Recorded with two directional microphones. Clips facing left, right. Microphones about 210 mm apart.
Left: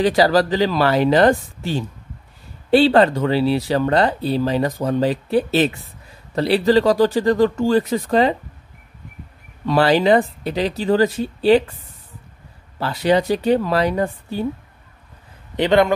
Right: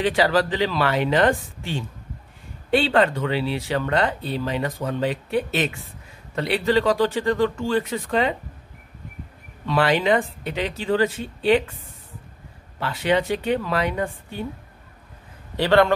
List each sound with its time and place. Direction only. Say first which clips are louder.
0.0 s speech: left 4 dB; 40° left (ahead or behind)
9.7 s speech: left 5 dB; 35° left (ahead or behind)
12.7 s speech: left 4 dB; 40° left (ahead or behind)
15.5 s speech: left 2 dB; 20° left (ahead or behind)